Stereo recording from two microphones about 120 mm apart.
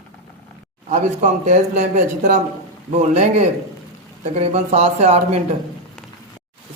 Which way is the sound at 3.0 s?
70° right (ahead or behind).